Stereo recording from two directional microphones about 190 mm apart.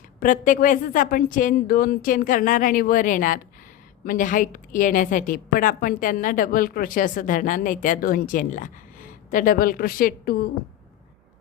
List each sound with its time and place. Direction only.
0.2 s a woman's voice: 45° left (ahead or behind)